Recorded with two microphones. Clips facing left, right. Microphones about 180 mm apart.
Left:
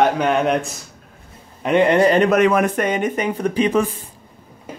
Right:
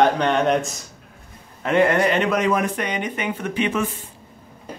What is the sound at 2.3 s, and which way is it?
Speech, 60° left (ahead or behind).